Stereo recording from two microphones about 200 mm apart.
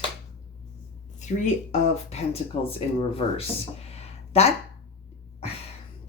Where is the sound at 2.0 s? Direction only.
30° left (ahead or behind).